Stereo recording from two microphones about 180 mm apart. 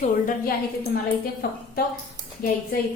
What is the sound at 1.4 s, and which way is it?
Speech, 55° left (ahead or behind).